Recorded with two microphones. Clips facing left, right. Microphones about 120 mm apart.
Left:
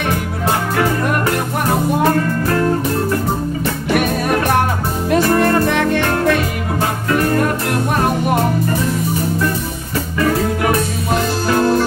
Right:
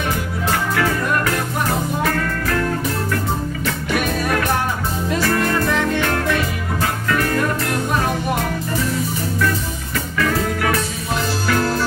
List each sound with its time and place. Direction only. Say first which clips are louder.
2.0 s music: left 6 dB; 30° left (ahead or behind)
5.4 s music: left 5 dB; 55° left (ahead or behind)
7.1 s music: left 4 dB; 35° left (ahead or behind)
10.1 s music: left 4 dB; 30° left (ahead or behind)